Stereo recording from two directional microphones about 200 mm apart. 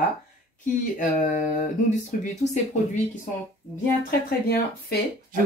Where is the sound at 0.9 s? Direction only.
40° left (ahead or behind).